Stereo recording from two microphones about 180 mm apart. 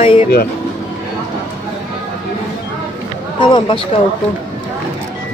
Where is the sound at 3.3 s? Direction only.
25° left (ahead or behind).